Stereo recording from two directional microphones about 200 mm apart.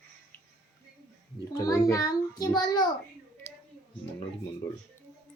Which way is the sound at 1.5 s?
15° left (ahead or behind).